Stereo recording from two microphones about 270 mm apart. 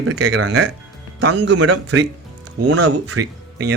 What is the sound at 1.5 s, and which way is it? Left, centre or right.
Speech, right.